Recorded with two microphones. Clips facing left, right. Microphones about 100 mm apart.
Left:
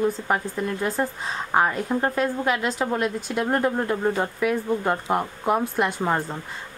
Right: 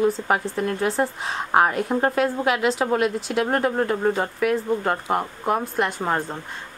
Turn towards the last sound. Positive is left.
turn(degrees=0)  # may be behind; listen again after turning